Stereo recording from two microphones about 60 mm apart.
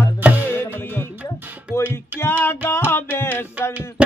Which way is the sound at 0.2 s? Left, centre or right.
Right.